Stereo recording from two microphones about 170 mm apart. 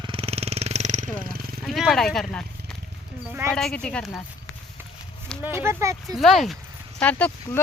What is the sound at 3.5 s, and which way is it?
Speech, centre (ahead or behind).